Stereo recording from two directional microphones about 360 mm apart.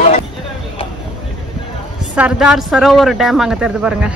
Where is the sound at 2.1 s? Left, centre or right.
Centre.